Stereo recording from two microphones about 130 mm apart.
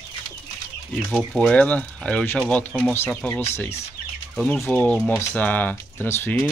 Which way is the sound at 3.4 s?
20° left (ahead or behind).